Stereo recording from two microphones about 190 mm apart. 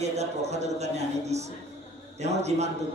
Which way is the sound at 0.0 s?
35° right (ahead or behind).